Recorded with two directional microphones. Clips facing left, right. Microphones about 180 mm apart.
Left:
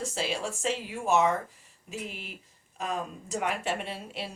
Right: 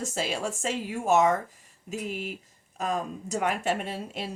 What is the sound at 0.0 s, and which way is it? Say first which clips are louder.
Speech: right 2 dB; 45° right (ahead or behind).